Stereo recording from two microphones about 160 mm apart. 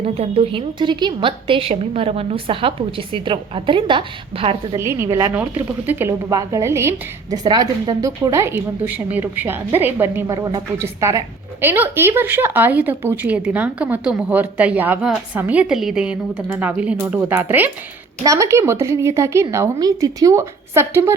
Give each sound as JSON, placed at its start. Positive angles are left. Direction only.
{"t": 0.0, "sound": "a woman's voice", "side_deg": -40}
{"t": 4.8, "sound": "speech", "side_deg": -15}
{"t": 5.3, "sound": "speech", "side_deg": -10}
{"t": 7.4, "sound": "speech", "side_deg": -25}